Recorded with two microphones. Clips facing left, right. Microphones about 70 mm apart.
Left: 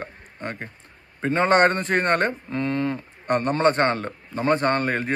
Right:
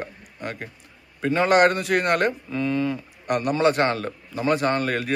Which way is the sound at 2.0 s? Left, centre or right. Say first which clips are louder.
Even; centre.